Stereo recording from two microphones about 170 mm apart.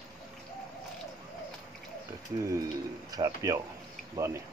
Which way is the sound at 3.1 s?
20° right (ahead or behind).